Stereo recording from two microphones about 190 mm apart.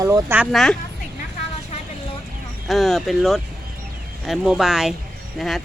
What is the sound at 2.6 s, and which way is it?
Speech, centre (ahead or behind).